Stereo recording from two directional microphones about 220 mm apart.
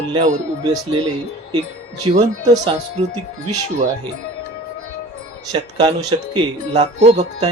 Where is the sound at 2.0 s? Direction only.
20° right (ahead or behind).